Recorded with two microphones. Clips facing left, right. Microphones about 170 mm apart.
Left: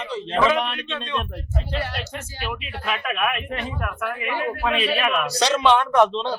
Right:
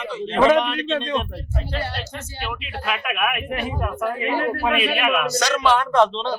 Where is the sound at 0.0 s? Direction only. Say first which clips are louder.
Right 2 dB; 35° left (ahead or behind).